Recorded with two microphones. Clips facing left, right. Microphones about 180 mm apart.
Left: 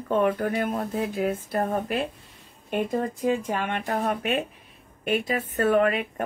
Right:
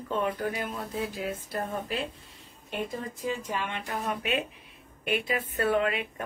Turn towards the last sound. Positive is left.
turn(degrees=50)  # may be behind; listen again after turning